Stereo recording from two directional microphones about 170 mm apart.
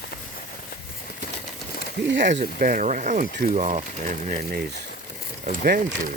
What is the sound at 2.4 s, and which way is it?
Speech, 55° right (ahead or behind).